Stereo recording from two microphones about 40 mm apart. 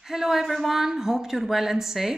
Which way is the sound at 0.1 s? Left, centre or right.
Centre.